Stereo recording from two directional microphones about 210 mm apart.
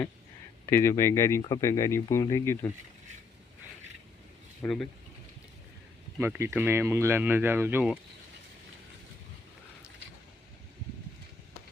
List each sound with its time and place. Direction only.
0.7 s speech: 10° left (ahead or behind)
4.6 s speech: 5° left (ahead or behind)
6.1 s speech: 10° right (ahead or behind)